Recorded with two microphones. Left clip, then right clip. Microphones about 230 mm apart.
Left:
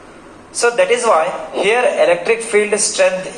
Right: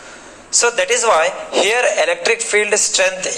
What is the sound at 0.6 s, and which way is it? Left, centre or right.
A man's voice, right.